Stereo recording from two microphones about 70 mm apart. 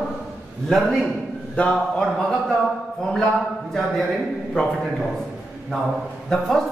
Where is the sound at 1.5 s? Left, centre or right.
Centre.